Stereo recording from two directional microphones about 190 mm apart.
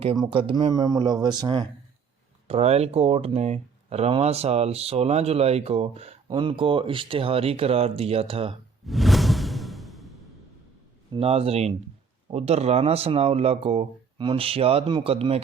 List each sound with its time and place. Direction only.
0.0 s speech: 30° right (ahead or behind)
2.5 s speech: 35° right (ahead or behind)
8.9 s whoosh: centre (ahead or behind)
11.1 s speech: 30° right (ahead or behind)